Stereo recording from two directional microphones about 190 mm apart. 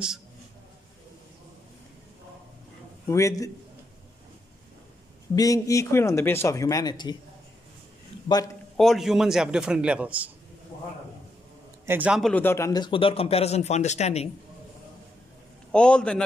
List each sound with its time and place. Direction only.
3.1 s speech: 15° left (ahead or behind)
5.3 s speech: 20° left (ahead or behind)
8.7 s a man's voice: centre (ahead or behind)
11.8 s a man's voice: 10° right (ahead or behind); by 14.3 s 35° left (ahead or behind)
15.7 s a man's voice: 5° left (ahead or behind)